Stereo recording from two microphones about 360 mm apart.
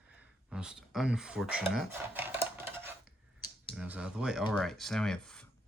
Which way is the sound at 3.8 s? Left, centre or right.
Centre.